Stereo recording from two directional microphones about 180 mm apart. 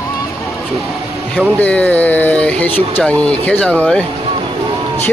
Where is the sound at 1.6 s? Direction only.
10° left (ahead or behind).